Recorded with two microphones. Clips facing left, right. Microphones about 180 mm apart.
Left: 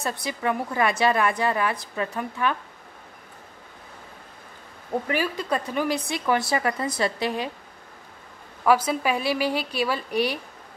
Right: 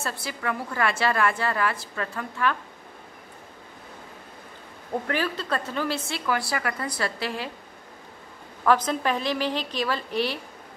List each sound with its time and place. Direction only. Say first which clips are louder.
0.0 s a woman's voice: left 4 dB; 20° left (ahead or behind)
5.0 s a woman's voice: even; 10° left (ahead or behind)
8.6 s a woman's voice: left 1 dB; 10° left (ahead or behind)